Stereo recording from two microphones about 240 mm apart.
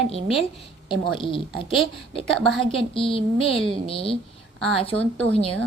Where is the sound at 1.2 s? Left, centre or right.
Left.